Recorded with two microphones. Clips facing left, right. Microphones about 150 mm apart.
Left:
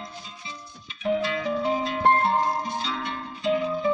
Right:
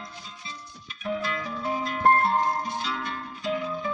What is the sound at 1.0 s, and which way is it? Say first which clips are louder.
Music: left 5 dB; 25° left (ahead or behind).